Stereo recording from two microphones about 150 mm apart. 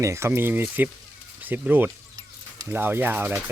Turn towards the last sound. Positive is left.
turn(degrees=-10)  # may be behind; listen again after turning